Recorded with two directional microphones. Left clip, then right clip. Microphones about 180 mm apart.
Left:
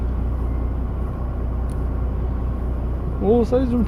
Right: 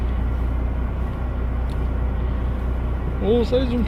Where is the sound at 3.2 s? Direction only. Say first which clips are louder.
Left 2 dB; 30° left (ahead or behind).